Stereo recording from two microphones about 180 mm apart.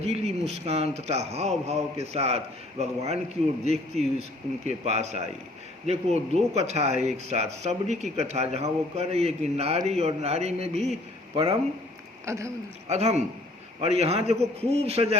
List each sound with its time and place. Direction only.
0.0 s a man's voice: 35° right (ahead or behind)
11.3 s speech: 25° right (ahead or behind)
12.2 s speech: 15° right (ahead or behind)
12.9 s a man's voice: 40° right (ahead or behind)